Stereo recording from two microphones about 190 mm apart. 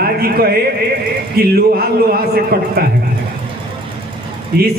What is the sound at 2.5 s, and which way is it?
Speech, 55° right (ahead or behind).